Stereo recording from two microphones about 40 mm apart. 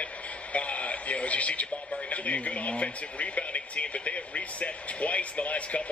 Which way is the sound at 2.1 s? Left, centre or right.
Left.